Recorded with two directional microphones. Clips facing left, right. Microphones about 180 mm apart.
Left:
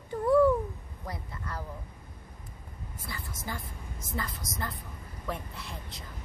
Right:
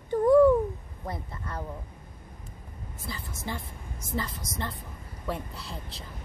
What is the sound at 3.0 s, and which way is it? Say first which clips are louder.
Speech: right 3 dB; 25° right (ahead or behind).